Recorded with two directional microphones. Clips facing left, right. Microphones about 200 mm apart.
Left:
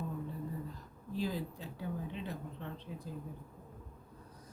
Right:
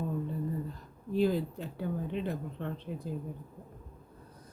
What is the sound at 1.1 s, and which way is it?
Speech, 60° right (ahead or behind).